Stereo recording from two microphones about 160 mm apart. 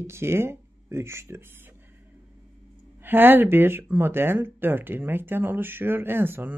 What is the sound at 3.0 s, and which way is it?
Speech, 15° right (ahead or behind).